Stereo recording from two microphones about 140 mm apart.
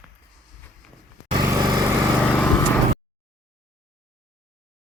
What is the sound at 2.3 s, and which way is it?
Vehicle, 15° left (ahead or behind).